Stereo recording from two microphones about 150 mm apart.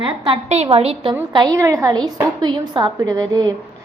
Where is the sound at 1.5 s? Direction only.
20° right (ahead or behind).